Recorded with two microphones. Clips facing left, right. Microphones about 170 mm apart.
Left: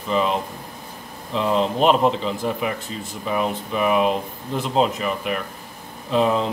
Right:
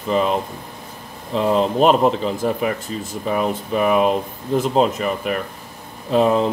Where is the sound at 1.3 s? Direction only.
45° right (ahead or behind).